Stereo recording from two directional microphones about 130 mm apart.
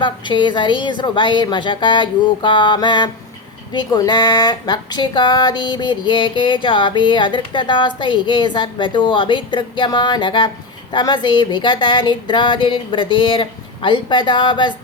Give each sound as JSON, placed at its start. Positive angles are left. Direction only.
{"t": 0.0, "sound": "speech", "side_deg": 35}